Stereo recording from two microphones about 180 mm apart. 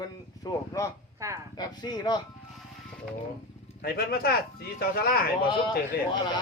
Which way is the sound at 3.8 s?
60° left (ahead or behind).